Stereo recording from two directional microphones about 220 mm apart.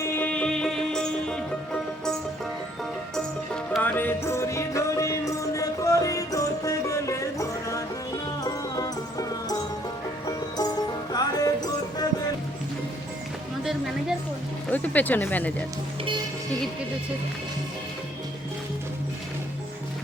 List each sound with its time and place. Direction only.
0.0 s music: 10° left (ahead or behind)
3.2 s music: 5° left (ahead or behind)
14.7 s speech: 5° left (ahead or behind)